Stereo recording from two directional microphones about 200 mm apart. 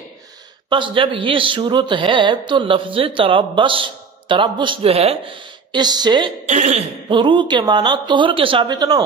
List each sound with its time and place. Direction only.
0.7 s a woman's voice: 25° right (ahead or behind)
6.4 s speech: 35° right (ahead or behind)
7.1 s a woman's voice: 25° right (ahead or behind)